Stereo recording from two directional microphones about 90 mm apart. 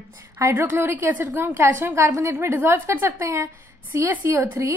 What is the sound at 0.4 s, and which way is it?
A woman's voice, 30° right (ahead or behind).